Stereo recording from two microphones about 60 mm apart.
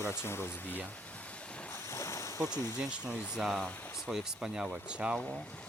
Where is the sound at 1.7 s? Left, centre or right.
Left.